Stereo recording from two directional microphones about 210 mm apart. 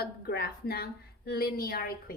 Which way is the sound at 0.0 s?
50° left (ahead or behind).